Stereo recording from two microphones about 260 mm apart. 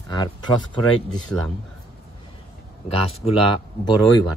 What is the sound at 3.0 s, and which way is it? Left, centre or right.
Speech, left.